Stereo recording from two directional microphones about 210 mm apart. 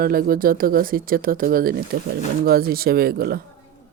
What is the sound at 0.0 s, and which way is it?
Speech, 45° right (ahead or behind).